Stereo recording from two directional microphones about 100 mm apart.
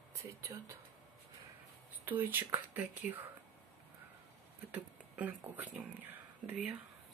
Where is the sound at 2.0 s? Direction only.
20° right (ahead or behind).